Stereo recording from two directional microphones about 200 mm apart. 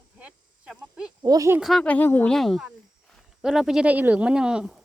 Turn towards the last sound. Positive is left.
turn(degrees=-5)  # may be behind; listen again after turning